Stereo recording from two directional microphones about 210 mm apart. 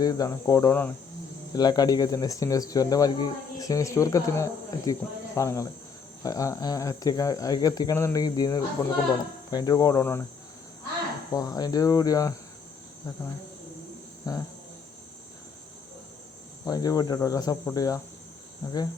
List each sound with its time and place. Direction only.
0.0 s speech: 20° left (ahead or behind)
11.3 s speech: 20° left (ahead or behind)
14.3 s speech: 15° left (ahead or behind)
16.6 s speech: 15° left (ahead or behind)